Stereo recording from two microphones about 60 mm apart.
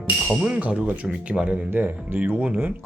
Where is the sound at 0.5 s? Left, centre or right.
Centre.